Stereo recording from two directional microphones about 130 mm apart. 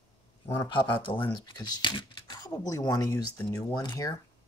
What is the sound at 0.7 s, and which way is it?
Speech, 40° left (ahead or behind).